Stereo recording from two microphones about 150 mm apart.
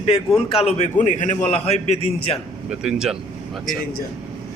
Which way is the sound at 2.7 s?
5° right (ahead or behind).